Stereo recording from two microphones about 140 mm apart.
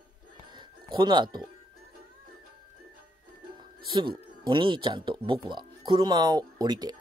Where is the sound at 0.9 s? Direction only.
35° right (ahead or behind).